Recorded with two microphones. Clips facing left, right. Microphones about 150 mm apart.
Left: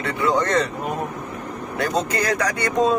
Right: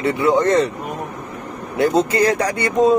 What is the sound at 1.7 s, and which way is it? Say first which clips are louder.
Speech: right 7 dB; 25° right (ahead or behind).